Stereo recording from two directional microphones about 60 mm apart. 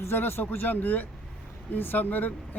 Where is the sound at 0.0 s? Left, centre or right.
Left.